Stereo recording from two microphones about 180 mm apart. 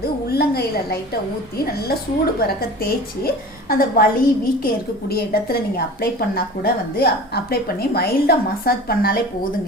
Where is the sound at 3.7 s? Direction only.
55° left (ahead or behind).